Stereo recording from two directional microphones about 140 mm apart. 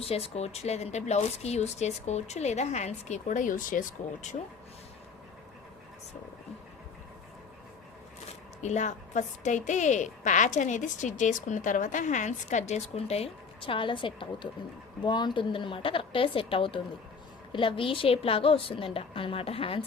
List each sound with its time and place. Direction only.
0.0 s speech: 45° left (ahead or behind); by 4.4 s 65° left (ahead or behind)
8.6 s a woman's voice: 55° left (ahead or behind); by 19.8 s 40° left (ahead or behind)